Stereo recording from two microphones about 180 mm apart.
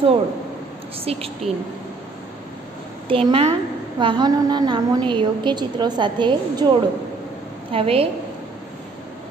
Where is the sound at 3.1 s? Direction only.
30° right (ahead or behind).